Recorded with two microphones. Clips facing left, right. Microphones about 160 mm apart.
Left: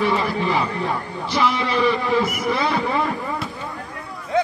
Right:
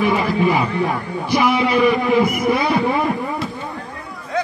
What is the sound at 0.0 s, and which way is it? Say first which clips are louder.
A man's voice: right 4 dB; 15° right (ahead or behind).